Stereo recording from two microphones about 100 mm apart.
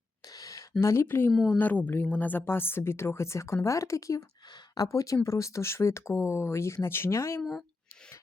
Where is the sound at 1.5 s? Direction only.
15° left (ahead or behind).